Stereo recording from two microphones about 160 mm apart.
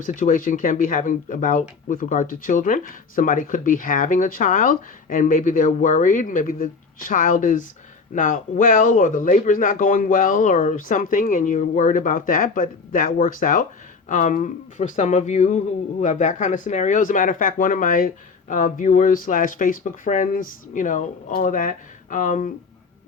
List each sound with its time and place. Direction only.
0.0 s speech: 55° left (ahead or behind)